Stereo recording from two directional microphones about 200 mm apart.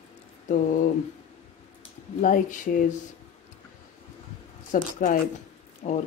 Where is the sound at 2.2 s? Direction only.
40° left (ahead or behind).